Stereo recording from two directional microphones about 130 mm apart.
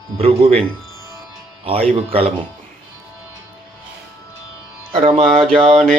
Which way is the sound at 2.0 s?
50° right (ahead or behind).